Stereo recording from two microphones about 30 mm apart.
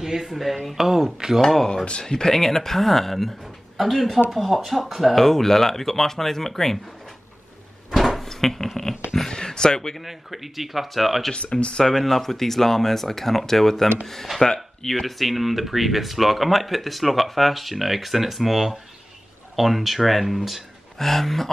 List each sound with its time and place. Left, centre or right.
0.0 s a sound: centre
0.3 s speech: centre
1.4 s speech: centre
1.9 s speech: left; by 5.2 s centre
5.2 s speech: centre
7.9 s a sound: centre
8.3 s a sound: centre
9.3 s a sound: left
10.0 s speech: centre
11.5 s speech: left
12.0 s speech: centre
14.4 s speech: left
14.9 s speech: centre
21.0 s speech: centre